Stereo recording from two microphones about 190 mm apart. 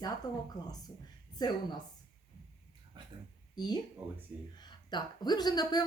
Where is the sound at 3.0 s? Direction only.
25° right (ahead or behind).